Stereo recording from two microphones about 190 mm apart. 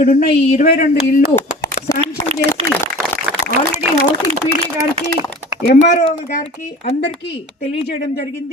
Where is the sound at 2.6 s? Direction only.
30° right (ahead or behind).